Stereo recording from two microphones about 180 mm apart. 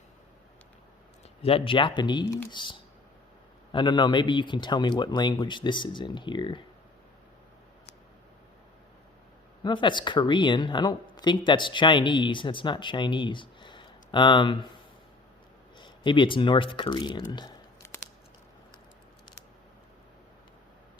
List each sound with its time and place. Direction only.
1.4 s speech: 30° left (ahead or behind)
9.6 s speech: 25° left (ahead or behind)
15.8 s speech: 25° left (ahead or behind)